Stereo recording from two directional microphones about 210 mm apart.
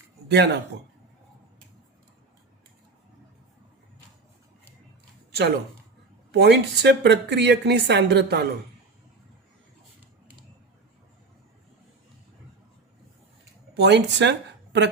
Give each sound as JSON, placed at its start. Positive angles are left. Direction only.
{"t": 0.3, "sound": "a woman's voice", "side_deg": -50}
{"t": 6.3, "sound": "a woman's voice", "side_deg": -55}
{"t": 13.7, "sound": "speech", "side_deg": -55}